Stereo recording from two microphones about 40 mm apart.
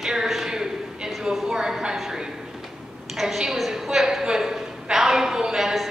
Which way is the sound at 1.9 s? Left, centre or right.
Centre.